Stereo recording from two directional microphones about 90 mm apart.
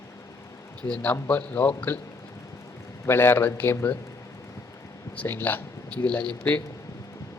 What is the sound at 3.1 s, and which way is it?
Speech, 25° left (ahead or behind).